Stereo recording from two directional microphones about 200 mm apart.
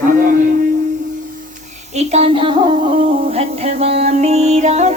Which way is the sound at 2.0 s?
30° right (ahead or behind).